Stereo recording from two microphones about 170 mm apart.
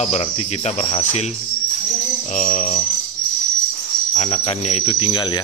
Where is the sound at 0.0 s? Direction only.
40° left (ahead or behind).